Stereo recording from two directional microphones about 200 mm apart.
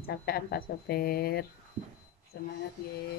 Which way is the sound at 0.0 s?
50° left (ahead or behind).